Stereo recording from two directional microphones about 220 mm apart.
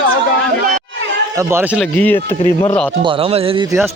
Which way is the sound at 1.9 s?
10° left (ahead or behind).